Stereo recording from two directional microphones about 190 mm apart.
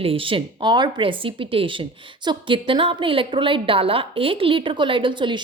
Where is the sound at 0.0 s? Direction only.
30° right (ahead or behind).